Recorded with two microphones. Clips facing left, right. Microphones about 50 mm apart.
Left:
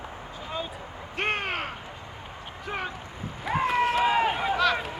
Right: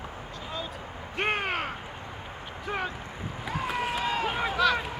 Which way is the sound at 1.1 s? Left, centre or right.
Centre.